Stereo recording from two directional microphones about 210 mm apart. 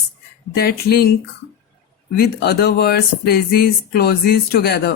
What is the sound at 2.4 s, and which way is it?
Speech, 50° left (ahead or behind).